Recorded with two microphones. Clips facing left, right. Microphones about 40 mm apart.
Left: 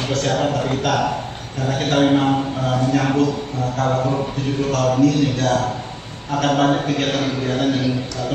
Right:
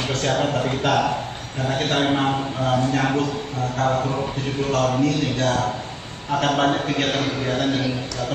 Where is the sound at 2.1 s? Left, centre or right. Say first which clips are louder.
Left 4 dB; centre.